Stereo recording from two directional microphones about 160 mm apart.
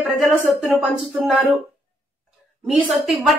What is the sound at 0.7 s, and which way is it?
Speech, centre (ahead or behind).